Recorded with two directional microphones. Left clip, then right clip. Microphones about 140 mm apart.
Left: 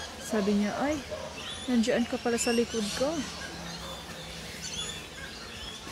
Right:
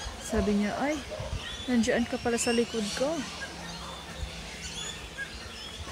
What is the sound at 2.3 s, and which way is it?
Speech, 25° right (ahead or behind).